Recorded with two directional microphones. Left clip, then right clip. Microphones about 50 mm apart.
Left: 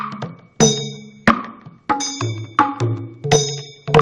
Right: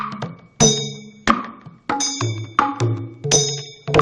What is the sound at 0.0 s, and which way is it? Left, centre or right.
Music, left.